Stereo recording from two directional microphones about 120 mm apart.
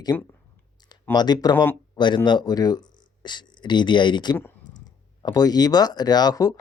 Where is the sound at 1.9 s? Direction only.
40° left (ahead or behind).